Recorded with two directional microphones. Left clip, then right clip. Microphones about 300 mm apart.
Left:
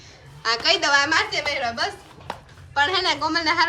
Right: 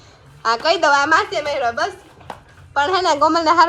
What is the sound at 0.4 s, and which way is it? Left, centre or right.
A woman's voice, centre.